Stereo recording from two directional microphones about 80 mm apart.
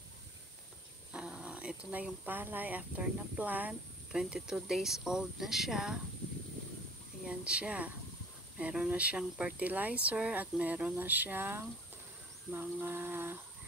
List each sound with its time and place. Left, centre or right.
1.1 s speech: centre
4.1 s speech: centre
7.2 s speech: centre
12.4 s a sound: right